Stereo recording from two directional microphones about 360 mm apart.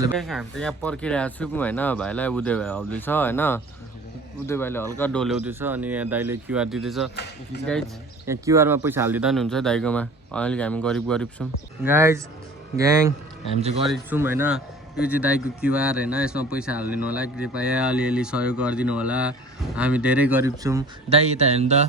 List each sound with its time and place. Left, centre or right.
0.2 s a man's voice: centre
7.5 s speech: left
8.3 s a man's voice: centre
13.8 s speech: centre